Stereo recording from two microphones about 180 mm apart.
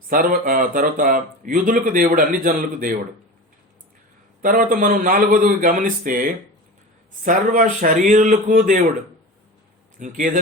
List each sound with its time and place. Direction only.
0.1 s speech: 50° right (ahead or behind)
4.4 s speech: 50° right (ahead or behind)
10.0 s speech: 45° right (ahead or behind)